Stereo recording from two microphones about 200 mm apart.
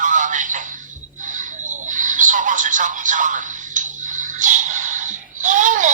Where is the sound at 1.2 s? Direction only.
40° right (ahead or behind).